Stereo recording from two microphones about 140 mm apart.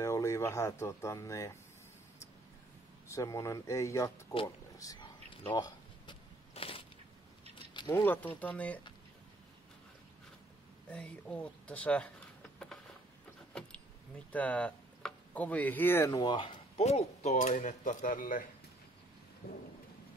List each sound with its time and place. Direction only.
0.0 s speech: 20° left (ahead or behind)
3.1 s speech: 20° left (ahead or behind)
4.7 s a sound: 30° left (ahead or behind)
7.5 s keys jangling: 30° left (ahead or behind)
7.9 s speech: 15° left (ahead or behind)
10.9 s speech: 5° left (ahead or behind)
14.3 s speech: 10° left (ahead or behind)
16.2 s speech: 35° left (ahead or behind)
16.8 s speech: 50° left (ahead or behind); by 18.5 s 75° left (ahead or behind)
19.4 s thunder: 90° left